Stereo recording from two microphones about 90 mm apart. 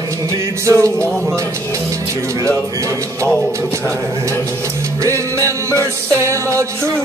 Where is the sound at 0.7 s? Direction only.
35° right (ahead or behind).